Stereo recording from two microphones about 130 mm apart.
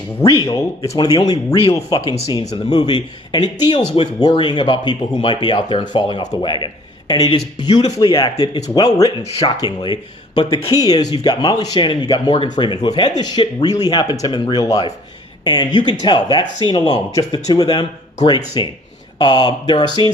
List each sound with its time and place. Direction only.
0.9 s speech: 30° left (ahead or behind)
9.2 s speech: 50° left (ahead or behind)
9.6 s speech: 35° left (ahead or behind)